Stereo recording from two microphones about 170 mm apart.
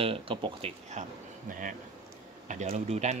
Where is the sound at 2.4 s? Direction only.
40° right (ahead or behind).